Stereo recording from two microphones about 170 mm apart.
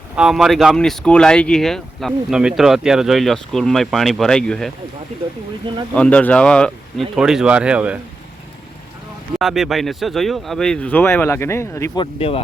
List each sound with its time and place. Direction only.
0.2 s speech: 5° right (ahead or behind)
5.9 s speech: 5° left (ahead or behind)
9.4 s speech: centre (ahead or behind); by 11.9 s 15° left (ahead or behind)
11.9 s speech: 35° left (ahead or behind)